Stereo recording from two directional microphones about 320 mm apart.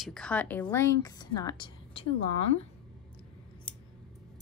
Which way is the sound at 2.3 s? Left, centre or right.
Left.